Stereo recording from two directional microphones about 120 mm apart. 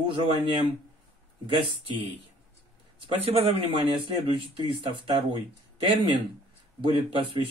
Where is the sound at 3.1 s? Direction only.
50° right (ahead or behind).